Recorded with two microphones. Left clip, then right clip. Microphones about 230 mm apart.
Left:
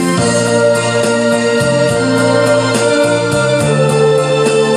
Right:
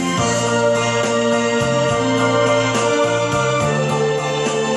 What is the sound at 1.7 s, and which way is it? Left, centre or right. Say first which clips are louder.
Organ: left 5 dB; left.